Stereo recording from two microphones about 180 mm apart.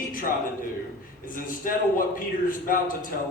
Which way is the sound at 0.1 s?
50° left (ahead or behind).